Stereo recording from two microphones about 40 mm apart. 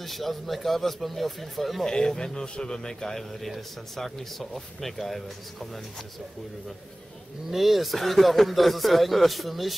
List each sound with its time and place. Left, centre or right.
0.0 s speech: centre
1.9 s a man's voice: centre
7.5 s speech: centre